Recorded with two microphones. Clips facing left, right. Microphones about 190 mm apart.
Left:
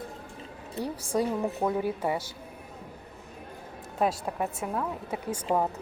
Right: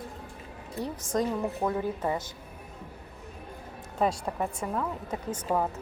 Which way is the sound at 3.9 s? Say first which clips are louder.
Even; 5° left (ahead or behind).